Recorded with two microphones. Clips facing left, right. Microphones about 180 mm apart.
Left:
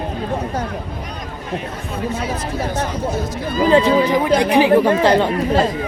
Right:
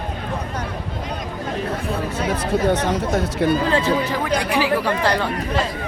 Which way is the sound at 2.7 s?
65° right (ahead or behind).